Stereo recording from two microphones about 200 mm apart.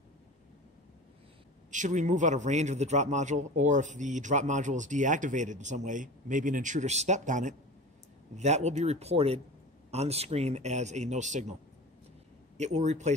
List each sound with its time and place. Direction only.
1.7 s a man's voice: 40° right (ahead or behind)
12.5 s a man's voice: 35° right (ahead or behind)